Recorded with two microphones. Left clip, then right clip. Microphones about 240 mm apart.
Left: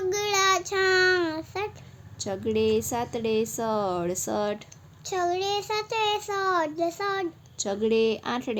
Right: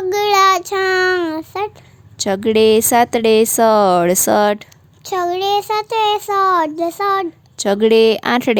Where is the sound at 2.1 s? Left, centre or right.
Right.